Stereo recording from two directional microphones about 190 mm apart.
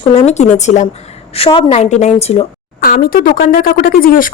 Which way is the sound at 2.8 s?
50° left (ahead or behind).